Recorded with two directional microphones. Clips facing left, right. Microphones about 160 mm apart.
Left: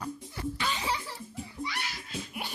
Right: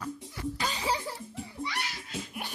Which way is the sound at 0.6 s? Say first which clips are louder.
Right 2 dB; 35° right (ahead or behind).